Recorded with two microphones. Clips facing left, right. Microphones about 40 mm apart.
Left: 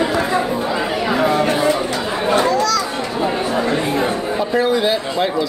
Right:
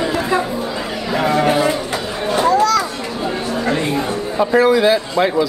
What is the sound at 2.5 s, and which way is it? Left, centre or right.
Children playing, right.